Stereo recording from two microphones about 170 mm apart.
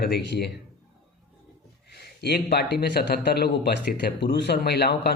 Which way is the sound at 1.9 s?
75° left (ahead or behind).